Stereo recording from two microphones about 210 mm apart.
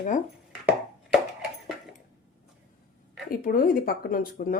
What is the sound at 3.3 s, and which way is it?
Speech, 45° left (ahead or behind).